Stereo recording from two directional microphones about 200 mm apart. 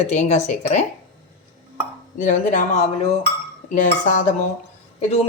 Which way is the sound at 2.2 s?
40° left (ahead or behind).